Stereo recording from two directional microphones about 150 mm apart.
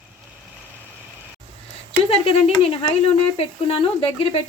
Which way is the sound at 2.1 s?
40° left (ahead or behind).